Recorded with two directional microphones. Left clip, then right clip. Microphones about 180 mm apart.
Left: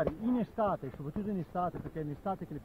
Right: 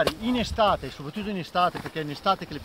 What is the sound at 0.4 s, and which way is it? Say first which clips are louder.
Speech: right 13 dB; 15° right (ahead or behind).